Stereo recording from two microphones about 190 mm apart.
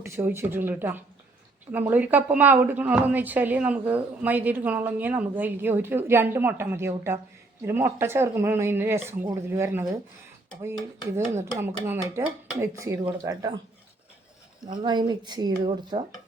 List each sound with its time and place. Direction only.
0.0 s speech: 15° right (ahead or behind)
11.5 s speech: 15° right (ahead or behind)
14.6 s speech: 25° right (ahead or behind)